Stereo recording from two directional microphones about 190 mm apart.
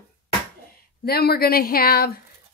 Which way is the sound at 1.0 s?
55° left (ahead or behind).